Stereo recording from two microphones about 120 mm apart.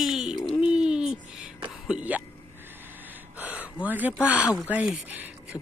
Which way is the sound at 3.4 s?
15° right (ahead or behind).